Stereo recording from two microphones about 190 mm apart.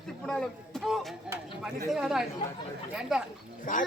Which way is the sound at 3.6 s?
45° left (ahead or behind).